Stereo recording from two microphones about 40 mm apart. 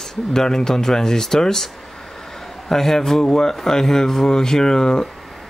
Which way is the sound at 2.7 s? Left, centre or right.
Centre.